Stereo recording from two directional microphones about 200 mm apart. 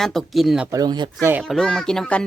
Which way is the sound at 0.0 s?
Centre (ahead or behind).